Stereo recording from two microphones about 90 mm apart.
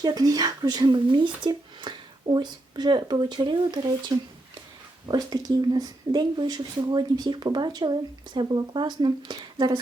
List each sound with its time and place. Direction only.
0.0 s speech: 45° right (ahead or behind)
5.0 s speech: 45° right (ahead or behind)